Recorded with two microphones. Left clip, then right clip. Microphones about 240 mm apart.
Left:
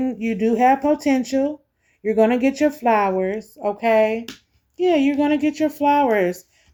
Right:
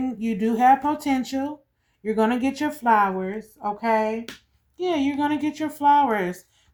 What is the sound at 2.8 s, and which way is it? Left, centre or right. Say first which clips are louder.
Speech: right 1 dB; right.